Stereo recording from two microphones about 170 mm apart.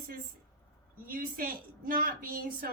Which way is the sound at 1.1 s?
55° right (ahead or behind).